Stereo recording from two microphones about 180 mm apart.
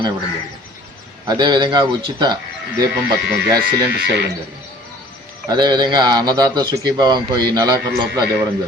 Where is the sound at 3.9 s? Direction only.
70° right (ahead or behind).